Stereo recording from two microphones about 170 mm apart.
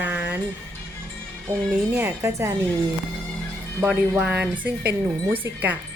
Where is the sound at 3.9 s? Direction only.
10° right (ahead or behind).